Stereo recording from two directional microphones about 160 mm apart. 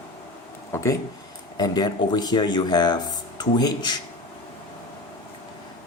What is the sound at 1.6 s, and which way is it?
Speech, 25° left (ahead or behind).